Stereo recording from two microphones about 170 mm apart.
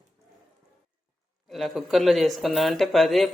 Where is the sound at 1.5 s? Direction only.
Centre (ahead or behind).